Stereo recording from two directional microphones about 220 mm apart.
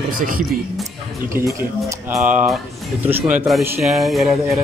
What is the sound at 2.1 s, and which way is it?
Speech, centre (ahead or behind).